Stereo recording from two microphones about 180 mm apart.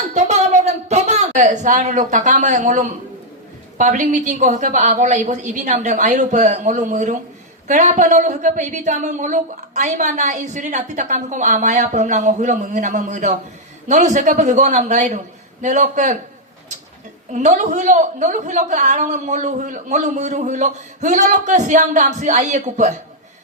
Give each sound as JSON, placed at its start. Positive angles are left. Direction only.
{"t": 0.1, "sound": "a sound", "side_deg": -40}
{"t": 3.8, "sound": "speech", "side_deg": -45}
{"t": 17.3, "sound": "speech", "side_deg": -40}